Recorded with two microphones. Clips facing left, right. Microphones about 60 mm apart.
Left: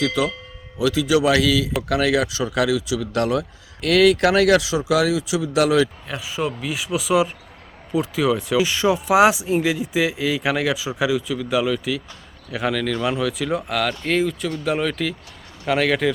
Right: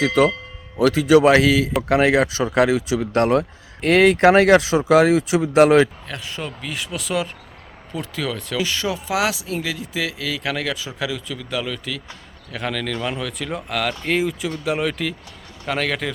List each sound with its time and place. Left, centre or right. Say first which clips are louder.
0.0 s speech: right 5 dB; right
6.1 s speech: left 5 dB; centre